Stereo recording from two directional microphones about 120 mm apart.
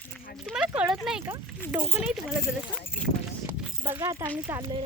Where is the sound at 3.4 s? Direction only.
20° right (ahead or behind).